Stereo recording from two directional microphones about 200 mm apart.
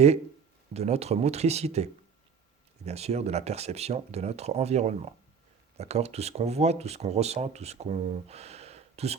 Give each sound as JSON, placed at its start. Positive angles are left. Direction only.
{"t": 0.7, "sound": "speech", "side_deg": -30}